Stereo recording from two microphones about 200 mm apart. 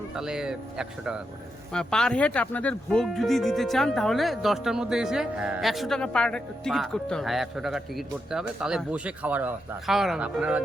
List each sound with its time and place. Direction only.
0.1 s speech: 5° right (ahead or behind)